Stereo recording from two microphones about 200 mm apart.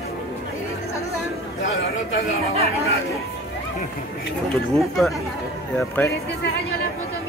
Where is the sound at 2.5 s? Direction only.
30° right (ahead or behind).